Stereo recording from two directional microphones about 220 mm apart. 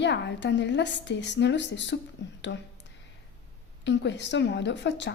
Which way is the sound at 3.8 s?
55° left (ahead or behind).